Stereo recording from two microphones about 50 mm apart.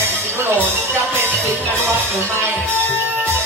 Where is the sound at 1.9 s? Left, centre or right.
Right.